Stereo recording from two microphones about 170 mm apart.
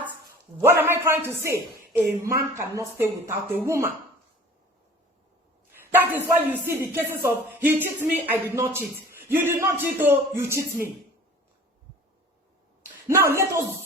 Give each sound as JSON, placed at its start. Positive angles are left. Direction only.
{"t": 0.6, "sound": "a man's voice", "side_deg": -15}
{"t": 2.2, "sound": "music", "side_deg": -15}
{"t": 5.8, "sound": "speech", "side_deg": -10}
{"t": 6.7, "sound": "music", "side_deg": -15}
{"t": 13.1, "sound": "music", "side_deg": -15}